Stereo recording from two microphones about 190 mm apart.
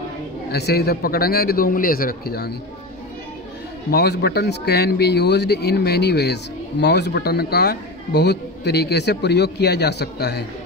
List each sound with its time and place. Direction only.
0.5 s a man's voice: 60° left (ahead or behind)
3.9 s speech: 60° left (ahead or behind)